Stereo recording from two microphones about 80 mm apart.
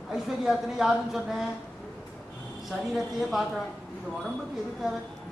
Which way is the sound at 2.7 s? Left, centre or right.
Centre.